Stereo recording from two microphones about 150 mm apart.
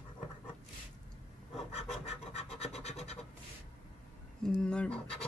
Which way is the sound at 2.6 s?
45° left (ahead or behind).